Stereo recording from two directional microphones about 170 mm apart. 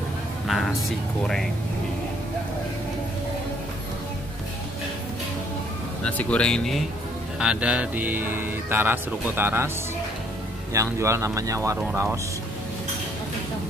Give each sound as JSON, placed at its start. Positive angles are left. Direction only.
{"t": 0.5, "sound": "speech", "side_deg": 0}
{"t": 6.0, "sound": "speech", "side_deg": 5}
{"t": 10.7, "sound": "speech", "side_deg": -15}